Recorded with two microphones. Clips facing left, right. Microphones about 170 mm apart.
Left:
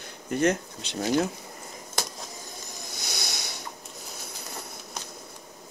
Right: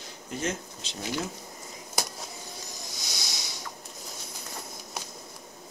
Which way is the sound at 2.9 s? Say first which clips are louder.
Left 6 dB; 60° left (ahead or behind).